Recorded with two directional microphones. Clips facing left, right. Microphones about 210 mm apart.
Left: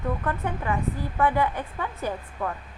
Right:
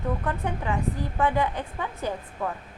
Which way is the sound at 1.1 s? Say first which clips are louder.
Left 2 dB; 15° right (ahead or behind).